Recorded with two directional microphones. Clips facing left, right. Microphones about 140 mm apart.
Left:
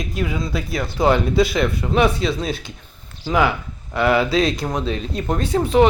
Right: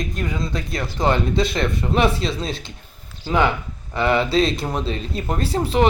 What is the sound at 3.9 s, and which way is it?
Speech, 5° left (ahead or behind).